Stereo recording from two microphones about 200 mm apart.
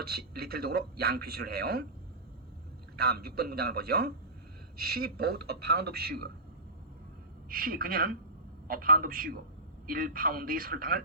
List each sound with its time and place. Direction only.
0.0 s a man's voice: 50° right (ahead or behind)
2.9 s a man's voice: 50° right (ahead or behind)
7.5 s a man's voice: 45° right (ahead or behind)